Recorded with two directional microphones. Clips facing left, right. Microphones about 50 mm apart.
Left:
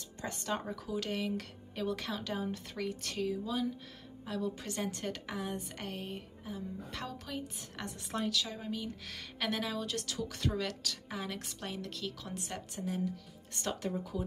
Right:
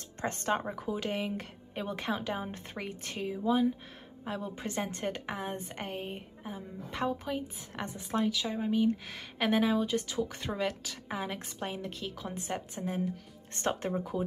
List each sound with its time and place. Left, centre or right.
0.2 s a woman's voice: right